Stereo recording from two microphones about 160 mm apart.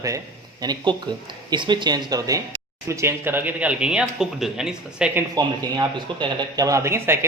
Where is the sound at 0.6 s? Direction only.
25° right (ahead or behind); by 5.2 s 5° right (ahead or behind).